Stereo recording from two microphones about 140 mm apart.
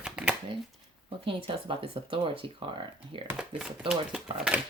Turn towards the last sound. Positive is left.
turn(degrees=-5)  # may be behind; listen again after turning